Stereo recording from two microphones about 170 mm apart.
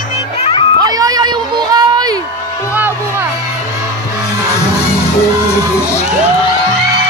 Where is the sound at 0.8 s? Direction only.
20° right (ahead or behind).